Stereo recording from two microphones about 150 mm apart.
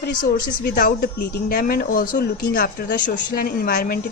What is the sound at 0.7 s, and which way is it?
Speech, 80° left.